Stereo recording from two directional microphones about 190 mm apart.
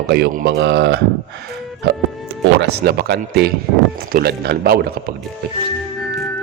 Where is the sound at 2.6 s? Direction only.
55° right (ahead or behind).